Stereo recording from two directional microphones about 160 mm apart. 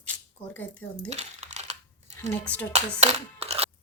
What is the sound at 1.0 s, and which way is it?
Coin, 45° right (ahead or behind).